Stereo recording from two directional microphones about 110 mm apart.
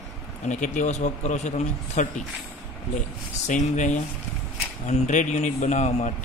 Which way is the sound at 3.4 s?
90° left.